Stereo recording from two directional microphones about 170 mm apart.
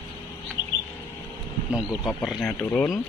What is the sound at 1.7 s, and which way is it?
Speech, centre (ahead or behind).